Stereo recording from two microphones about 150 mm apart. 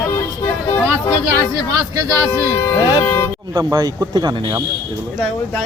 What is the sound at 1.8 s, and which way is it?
Speech, 25° right (ahead or behind).